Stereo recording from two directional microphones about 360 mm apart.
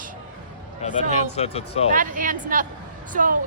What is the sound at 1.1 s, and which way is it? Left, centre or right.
Speech, centre.